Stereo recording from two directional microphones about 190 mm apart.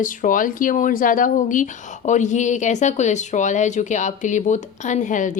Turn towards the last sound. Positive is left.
turn(degrees=40)  # may be behind; listen again after turning